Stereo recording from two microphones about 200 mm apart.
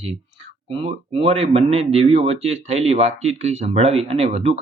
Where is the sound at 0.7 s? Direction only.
30° right (ahead or behind).